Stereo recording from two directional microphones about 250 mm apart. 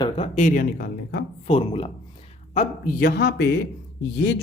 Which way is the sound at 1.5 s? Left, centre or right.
Left.